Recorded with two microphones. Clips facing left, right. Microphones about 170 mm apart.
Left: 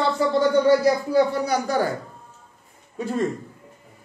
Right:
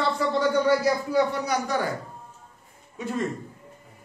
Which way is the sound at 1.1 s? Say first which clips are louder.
Left 4 dB; 35° left (ahead or behind).